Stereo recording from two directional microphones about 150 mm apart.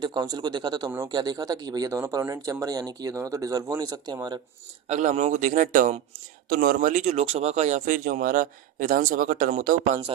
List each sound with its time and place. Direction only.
0.0 s speech: 30° right (ahead or behind)
4.9 s speech: 50° right (ahead or behind)